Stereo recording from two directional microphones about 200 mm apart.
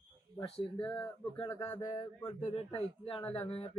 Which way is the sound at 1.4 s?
15° left (ahead or behind).